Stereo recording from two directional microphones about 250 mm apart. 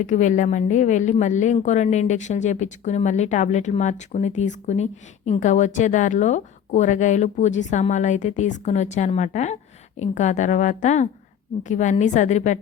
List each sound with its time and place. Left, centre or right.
0.0 s speech: left